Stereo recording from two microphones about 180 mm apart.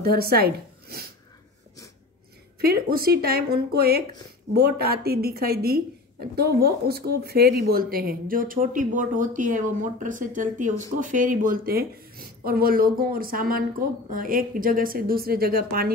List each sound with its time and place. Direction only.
0.0 s speech: 60° right (ahead or behind)
2.6 s speech: 60° right (ahead or behind)